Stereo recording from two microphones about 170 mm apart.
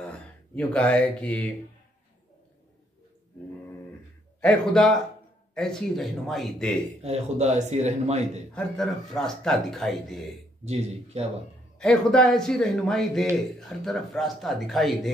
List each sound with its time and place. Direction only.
0.2 s speech: 10° left (ahead or behind)
4.4 s speech: 5° left (ahead or behind)
7.0 s a man's voice: 40° right (ahead or behind)
8.5 s speech: 5° left (ahead or behind)
10.6 s a man's voice: 40° right (ahead or behind)
11.8 s speech: 5° left (ahead or behind)